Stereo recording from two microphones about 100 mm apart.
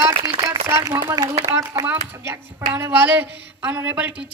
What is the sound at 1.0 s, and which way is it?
Speech, 45° right (ahead or behind).